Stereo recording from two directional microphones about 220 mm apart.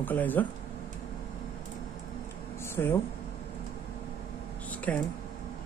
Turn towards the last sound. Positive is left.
turn(degrees=5)  # may be behind; listen again after turning